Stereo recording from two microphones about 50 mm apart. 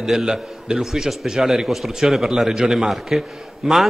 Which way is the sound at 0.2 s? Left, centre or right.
Centre.